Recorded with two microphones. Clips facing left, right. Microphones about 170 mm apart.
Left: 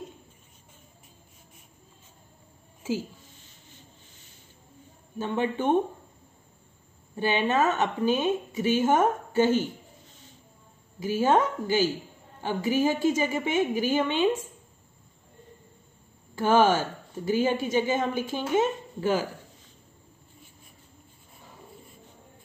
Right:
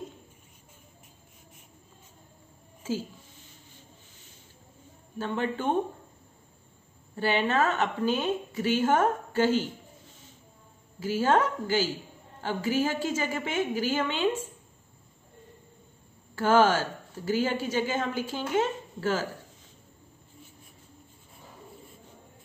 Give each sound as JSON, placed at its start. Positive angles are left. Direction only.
{"t": 2.8, "sound": "a woman's voice", "side_deg": 10}
{"t": 5.2, "sound": "a woman's voice", "side_deg": 20}
{"t": 7.2, "sound": "a woman's voice", "side_deg": 20}
{"t": 11.0, "sound": "a woman's voice", "side_deg": 15}
{"t": 16.3, "sound": "a woman's voice", "side_deg": 15}